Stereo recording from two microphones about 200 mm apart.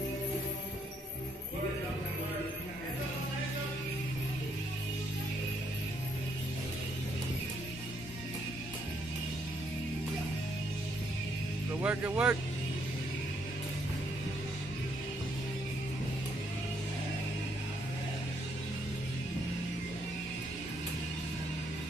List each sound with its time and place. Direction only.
11.8 s speech: 5° right (ahead or behind)